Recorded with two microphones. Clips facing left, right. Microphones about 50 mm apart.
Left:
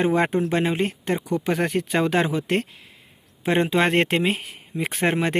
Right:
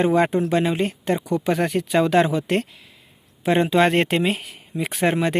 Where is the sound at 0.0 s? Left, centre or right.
Left.